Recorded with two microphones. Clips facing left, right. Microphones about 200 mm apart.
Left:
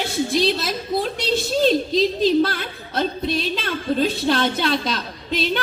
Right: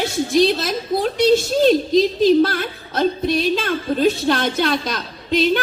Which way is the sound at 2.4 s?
50° right (ahead or behind).